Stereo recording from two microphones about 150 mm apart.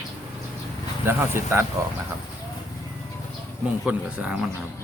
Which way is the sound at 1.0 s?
15° right (ahead or behind).